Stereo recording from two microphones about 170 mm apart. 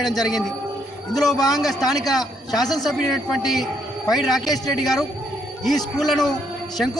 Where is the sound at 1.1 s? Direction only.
Centre (ahead or behind).